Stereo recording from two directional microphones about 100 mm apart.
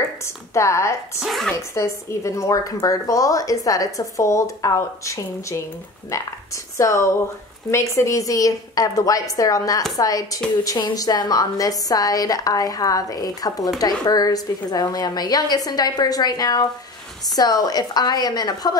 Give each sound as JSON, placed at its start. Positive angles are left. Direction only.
{"t": 0.6, "sound": "speech", "side_deg": 30}
{"t": 1.2, "sound": "speech", "side_deg": 0}
{"t": 1.5, "sound": "speech", "side_deg": 30}